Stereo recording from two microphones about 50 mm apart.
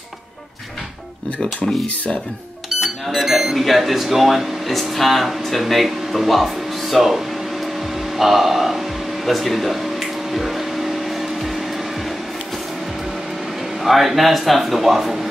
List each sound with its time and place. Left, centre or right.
2.8 s speech: centre
8.2 s speech: centre
10.3 s squish: centre
13.8 s speech: centre